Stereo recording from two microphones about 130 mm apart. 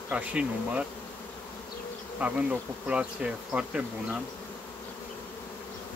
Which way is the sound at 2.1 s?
10° right (ahead or behind).